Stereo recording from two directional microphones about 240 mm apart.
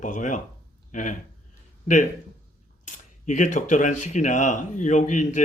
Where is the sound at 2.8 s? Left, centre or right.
Left.